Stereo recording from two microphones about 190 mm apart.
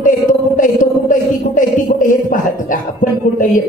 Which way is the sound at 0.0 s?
45° left (ahead or behind).